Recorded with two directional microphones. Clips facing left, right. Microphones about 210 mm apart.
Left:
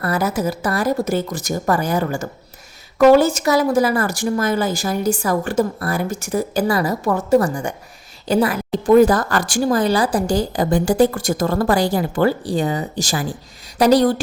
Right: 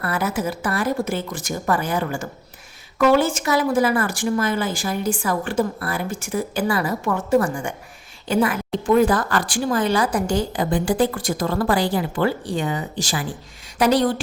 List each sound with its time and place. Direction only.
0.0 s a woman's voice: 40° left (ahead or behind)